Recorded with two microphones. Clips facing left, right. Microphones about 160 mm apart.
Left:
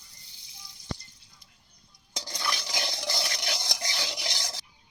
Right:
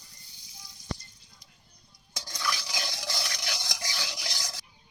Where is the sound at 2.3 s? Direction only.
25° left (ahead or behind).